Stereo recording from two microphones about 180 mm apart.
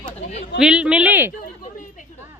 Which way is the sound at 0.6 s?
5° right (ahead or behind).